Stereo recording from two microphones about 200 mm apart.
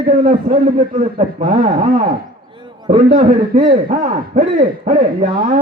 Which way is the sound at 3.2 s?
45° right (ahead or behind).